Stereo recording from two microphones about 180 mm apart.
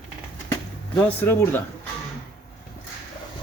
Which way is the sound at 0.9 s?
10° left (ahead or behind).